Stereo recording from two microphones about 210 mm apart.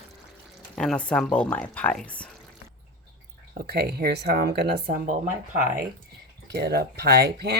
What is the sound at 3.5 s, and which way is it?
Speech, 45° right (ahead or behind).